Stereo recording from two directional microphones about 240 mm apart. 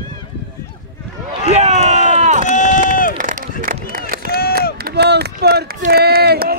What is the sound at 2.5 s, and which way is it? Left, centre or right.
Run, left.